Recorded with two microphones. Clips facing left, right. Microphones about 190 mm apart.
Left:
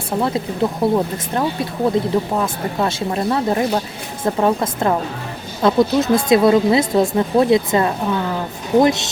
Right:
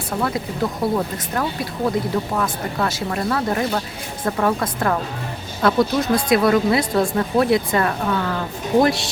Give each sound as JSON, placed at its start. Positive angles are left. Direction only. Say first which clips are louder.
{"t": 0.2, "sound": "speech", "louder": "left 4 dB", "side_deg": 25}